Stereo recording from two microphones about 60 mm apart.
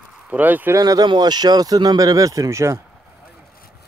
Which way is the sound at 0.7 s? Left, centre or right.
Right.